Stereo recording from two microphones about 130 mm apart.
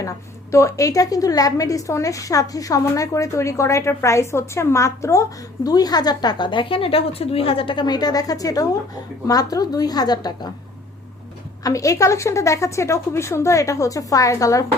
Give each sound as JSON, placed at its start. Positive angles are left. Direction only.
{"t": 0.5, "sound": "a woman's voice", "side_deg": 25}
{"t": 11.6, "sound": "a woman's voice", "side_deg": 25}